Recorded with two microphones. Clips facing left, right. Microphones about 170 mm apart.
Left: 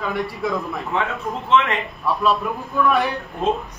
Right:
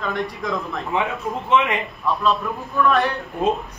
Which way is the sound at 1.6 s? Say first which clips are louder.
Left 1 dB; 10° right (ahead or behind).